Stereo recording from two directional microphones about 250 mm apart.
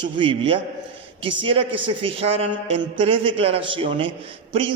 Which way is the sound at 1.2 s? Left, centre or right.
Right.